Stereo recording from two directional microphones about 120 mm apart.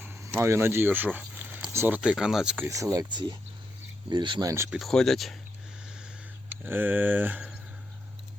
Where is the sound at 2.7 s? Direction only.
25° right (ahead or behind).